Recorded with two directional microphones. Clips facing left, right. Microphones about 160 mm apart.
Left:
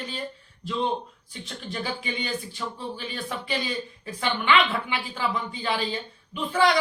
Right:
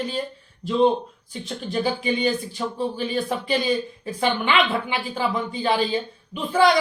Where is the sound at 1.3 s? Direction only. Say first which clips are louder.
Right 6 dB; 35° right (ahead or behind).